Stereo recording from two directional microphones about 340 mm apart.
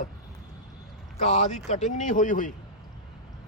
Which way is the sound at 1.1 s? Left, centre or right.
Centre.